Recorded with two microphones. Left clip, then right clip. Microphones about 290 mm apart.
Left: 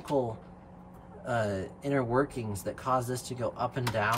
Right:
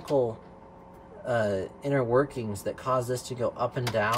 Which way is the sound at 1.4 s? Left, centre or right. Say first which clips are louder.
Right 4 dB; centre.